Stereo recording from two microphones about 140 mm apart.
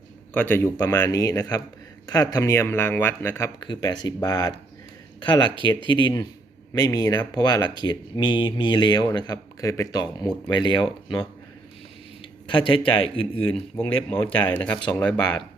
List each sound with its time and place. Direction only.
0.3 s speech: 15° left (ahead or behind)
3.6 s speech: 30° left (ahead or behind)
12.5 s speech: 40° left (ahead or behind)
13.5 s speech: 10° left (ahead or behind)